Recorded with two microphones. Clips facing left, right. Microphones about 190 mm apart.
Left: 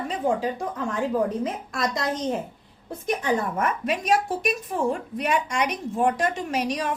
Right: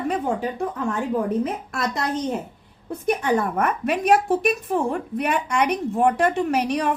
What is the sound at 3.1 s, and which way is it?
Speech, 60° right (ahead or behind).